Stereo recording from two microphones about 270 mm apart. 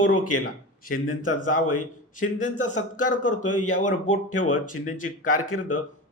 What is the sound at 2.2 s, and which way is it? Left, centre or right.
Speech, left.